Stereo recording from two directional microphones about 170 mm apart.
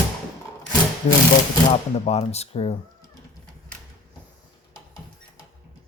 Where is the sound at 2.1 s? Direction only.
40° left (ahead or behind).